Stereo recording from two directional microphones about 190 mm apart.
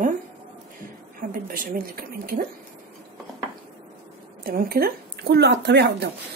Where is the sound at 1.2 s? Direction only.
45° right (ahead or behind).